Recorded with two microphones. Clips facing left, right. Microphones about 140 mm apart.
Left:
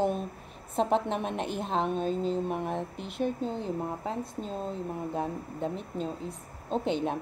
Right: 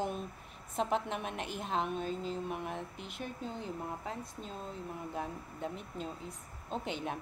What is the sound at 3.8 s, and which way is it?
Speech, 35° left (ahead or behind).